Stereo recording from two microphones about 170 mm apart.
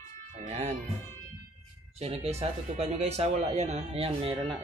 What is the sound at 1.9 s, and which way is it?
Speech, 35° right (ahead or behind).